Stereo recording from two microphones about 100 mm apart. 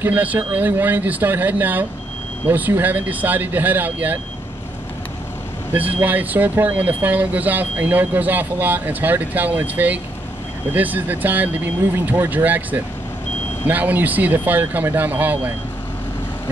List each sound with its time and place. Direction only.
0.0 s speech: 20° right (ahead or behind)
5.7 s speech: 15° right (ahead or behind)